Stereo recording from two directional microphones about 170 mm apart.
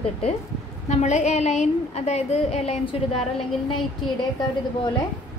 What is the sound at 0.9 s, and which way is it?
A woman's voice, 40° left (ahead or behind).